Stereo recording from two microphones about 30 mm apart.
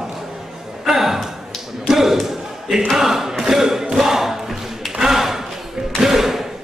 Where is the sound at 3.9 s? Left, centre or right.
Centre.